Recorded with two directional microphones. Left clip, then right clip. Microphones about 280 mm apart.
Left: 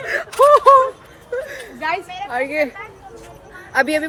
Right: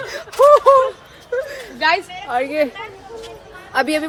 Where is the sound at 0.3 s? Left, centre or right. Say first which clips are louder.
Right 1 dB; centre.